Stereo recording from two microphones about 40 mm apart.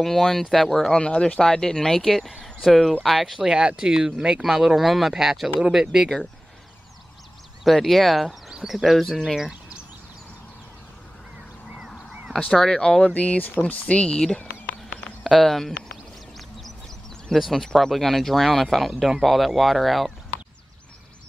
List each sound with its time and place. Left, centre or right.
0.0 s speech: centre
0.9 s speech: left
1.4 s speech: centre
3.4 s speech: right
4.4 s speech: centre
7.8 s speech: centre
8.3 s speech: centre
11.7 s a sound: centre
12.4 s speech: centre
13.0 s speech: left
15.2 s speech: centre
15.9 s a sound: centre
17.3 s speech: centre